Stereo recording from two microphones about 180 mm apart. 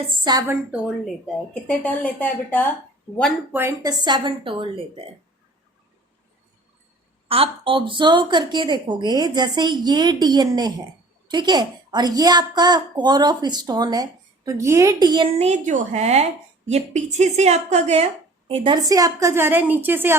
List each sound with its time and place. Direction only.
0.2 s a woman's voice: 20° right (ahead or behind)
1.6 s a woman's voice: 5° left (ahead or behind)
3.5 s a woman's voice: 15° right (ahead or behind)
7.3 s a woman's voice: 30° right (ahead or behind)
15.4 s a woman's voice: 40° right (ahead or behind); by 20.1 s 10° right (ahead or behind)